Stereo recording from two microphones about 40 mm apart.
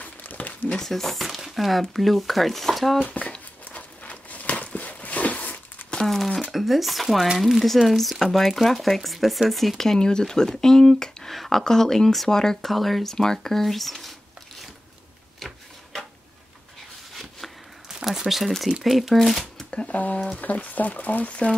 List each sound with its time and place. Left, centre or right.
0.0 s a sound: left
0.7 s speech: centre
3.1 s speech: left
3.6 s a sound: left
6.0 s speech: centre
9.9 s speech: centre
17.8 s a sound: centre
18.8 s speech: centre
19.9 s speech: left